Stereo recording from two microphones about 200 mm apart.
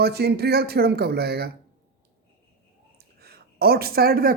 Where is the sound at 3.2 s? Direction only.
50° right (ahead or behind).